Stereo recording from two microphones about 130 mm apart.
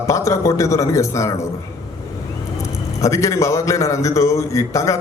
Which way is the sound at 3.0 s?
25° left (ahead or behind).